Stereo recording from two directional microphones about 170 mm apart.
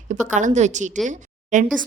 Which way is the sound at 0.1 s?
45° right (ahead or behind).